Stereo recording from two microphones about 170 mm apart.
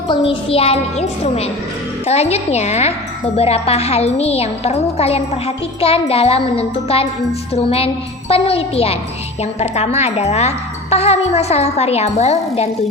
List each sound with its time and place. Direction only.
0.1 s speech: 30° left (ahead or behind)